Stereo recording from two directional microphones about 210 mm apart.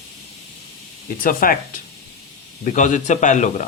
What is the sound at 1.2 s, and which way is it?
Speech, 40° left (ahead or behind).